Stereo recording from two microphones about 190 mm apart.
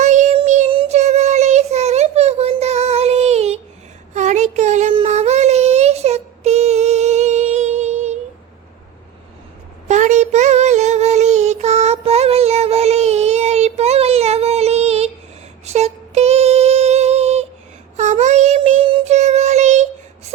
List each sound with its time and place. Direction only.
0.0 s music: 40° right (ahead or behind)
0.3 s child singing: 40° right (ahead or behind)
4.1 s a sound: 40° right (ahead or behind)
5.0 s child singing: 35° right (ahead or behind)
9.9 s child singing: 40° right (ahead or behind)
15.6 s female singing: 35° right (ahead or behind)
17.9 s child singing: 40° right (ahead or behind)